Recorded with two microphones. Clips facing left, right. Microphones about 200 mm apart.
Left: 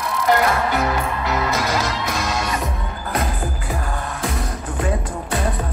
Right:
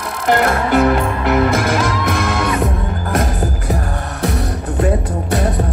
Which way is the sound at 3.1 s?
45° right (ahead or behind).